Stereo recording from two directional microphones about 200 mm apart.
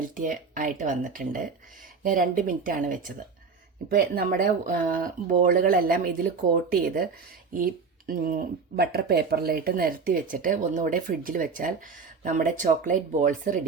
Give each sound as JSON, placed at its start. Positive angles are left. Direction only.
{"t": 0.1, "sound": "speech", "side_deg": -40}